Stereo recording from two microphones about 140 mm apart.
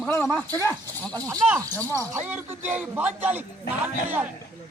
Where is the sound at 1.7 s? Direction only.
15° left (ahead or behind).